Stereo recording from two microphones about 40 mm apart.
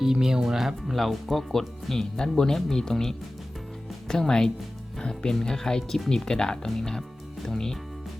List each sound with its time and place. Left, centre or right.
0.0 s speech: centre